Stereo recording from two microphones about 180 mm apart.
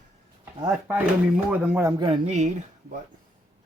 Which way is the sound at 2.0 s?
25° right (ahead or behind).